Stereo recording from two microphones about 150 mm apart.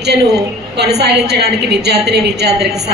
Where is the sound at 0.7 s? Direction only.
90° right.